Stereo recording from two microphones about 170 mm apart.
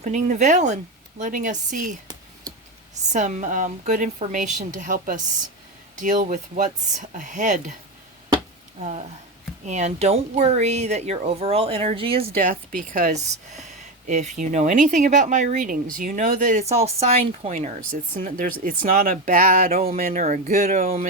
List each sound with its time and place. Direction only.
0.0 s speech: 45° right (ahead or behind)
8.8 s speech: 40° right (ahead or behind)
12.7 s speech: 50° right (ahead or behind); by 17.5 s 35° right (ahead or behind)
17.5 s speech: 55° right (ahead or behind)